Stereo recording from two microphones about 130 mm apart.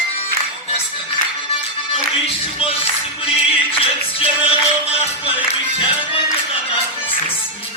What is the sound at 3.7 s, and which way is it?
Music, 45° left (ahead or behind).